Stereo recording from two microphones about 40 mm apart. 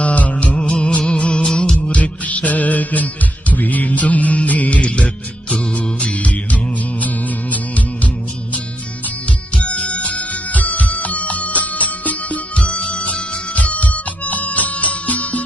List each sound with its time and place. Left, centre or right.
0.0 s music: left
6.1 s music: left
9.6 s music: left